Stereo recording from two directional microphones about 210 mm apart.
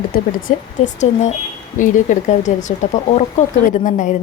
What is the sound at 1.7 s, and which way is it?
Speech, 40° left (ahead or behind).